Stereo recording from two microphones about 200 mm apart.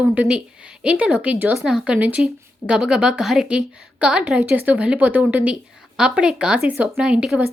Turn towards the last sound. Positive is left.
turn(degrees=-5)  # may be behind; listen again after turning